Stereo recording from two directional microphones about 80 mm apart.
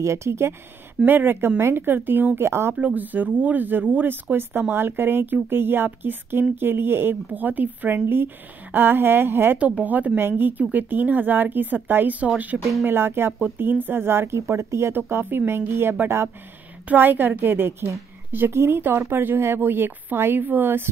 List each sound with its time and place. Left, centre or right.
0.0 s a woman's voice: right
2.7 s a woman's voice: centre